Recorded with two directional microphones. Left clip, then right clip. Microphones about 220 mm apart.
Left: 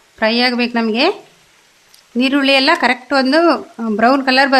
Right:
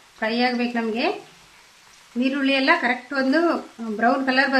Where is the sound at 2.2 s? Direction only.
55° left (ahead or behind).